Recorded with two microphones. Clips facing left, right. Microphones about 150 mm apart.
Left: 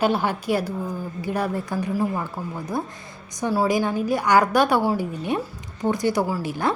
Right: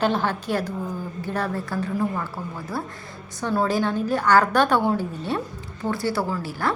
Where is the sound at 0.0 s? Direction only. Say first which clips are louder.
Left 1 dB; 10° left (ahead or behind).